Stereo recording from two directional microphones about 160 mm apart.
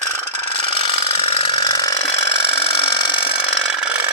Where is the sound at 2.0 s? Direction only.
40° left (ahead or behind).